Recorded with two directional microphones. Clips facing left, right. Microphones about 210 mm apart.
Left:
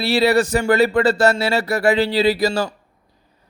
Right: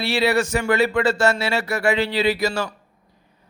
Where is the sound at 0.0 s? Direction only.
35° left (ahead or behind).